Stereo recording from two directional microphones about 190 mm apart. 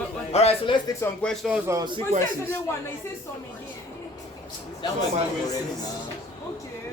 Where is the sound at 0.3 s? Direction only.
30° left (ahead or behind).